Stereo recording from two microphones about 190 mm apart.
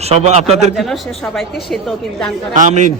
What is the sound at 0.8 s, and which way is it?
Speech, centre (ahead or behind).